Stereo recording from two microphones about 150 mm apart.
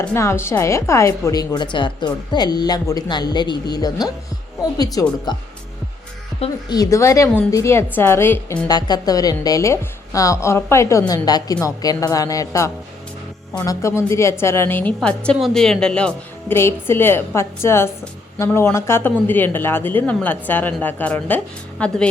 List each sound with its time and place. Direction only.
0.0 s a woman's voice: 15° left (ahead or behind)
6.7 s a woman's voice: 25° left (ahead or behind)
8.6 s a woman's voice: 25° left (ahead or behind); by 22.1 s 5° left (ahead or behind)